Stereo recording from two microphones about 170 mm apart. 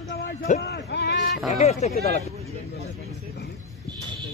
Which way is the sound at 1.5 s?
40° left (ahead or behind).